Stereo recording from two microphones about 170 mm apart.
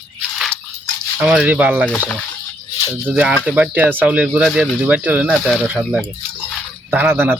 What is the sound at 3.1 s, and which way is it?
Speech, 5° right (ahead or behind).